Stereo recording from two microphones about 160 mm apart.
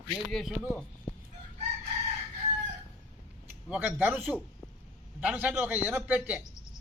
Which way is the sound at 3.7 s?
10° right (ahead or behind).